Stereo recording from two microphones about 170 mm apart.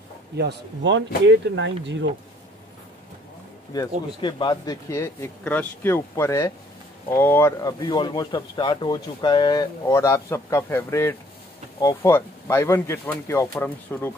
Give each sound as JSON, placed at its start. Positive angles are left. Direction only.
{"t": 0.4, "sound": "speech", "side_deg": -85}
{"t": 3.7, "sound": "speech", "side_deg": 20}